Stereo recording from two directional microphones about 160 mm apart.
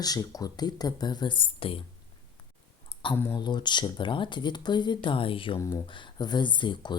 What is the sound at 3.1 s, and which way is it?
Speech, 15° left (ahead or behind).